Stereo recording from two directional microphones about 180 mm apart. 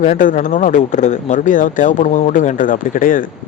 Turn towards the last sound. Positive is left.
turn(degrees=50)  # may be behind; listen again after turning